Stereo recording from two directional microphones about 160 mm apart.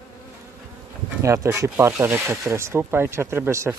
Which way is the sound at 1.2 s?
20° right (ahead or behind).